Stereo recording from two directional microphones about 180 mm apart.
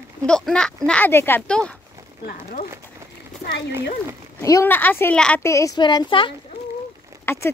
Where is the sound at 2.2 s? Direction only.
55° left (ahead or behind).